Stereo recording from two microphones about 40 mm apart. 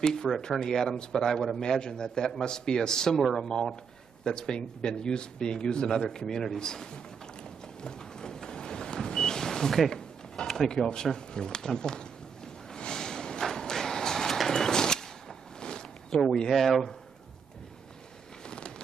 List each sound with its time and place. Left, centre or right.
0.0 s a man's voice: centre
3.2 s speech: centre
4.2 s speech: centre
7.8 s a sound: centre
15.6 s zipper: centre
16.4 s speech: centre